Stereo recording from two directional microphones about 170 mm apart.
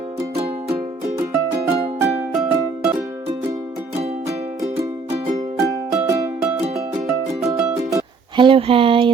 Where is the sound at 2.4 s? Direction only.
10° right (ahead or behind).